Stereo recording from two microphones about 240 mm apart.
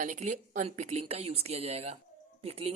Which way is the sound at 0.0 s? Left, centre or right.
Right.